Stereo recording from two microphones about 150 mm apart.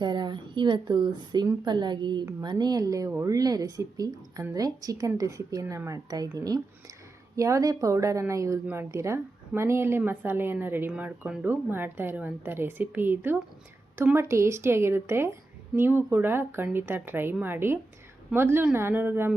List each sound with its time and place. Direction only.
0.0 s a woman's voice: 30° right (ahead or behind); by 19.3 s 15° right (ahead or behind)